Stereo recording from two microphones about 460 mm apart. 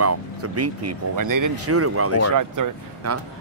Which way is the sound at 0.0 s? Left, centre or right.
Right.